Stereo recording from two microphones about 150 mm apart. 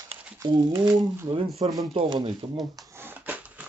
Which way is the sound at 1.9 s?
35° right (ahead or behind).